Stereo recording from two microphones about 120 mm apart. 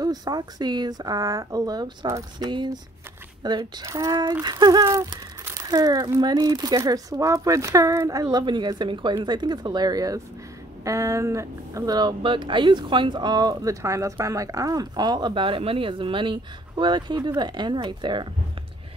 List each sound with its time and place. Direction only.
0.0 s speech: 35° right (ahead or behind)